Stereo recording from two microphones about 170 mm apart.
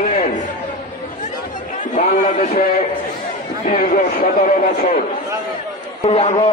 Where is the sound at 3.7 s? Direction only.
45° left (ahead or behind).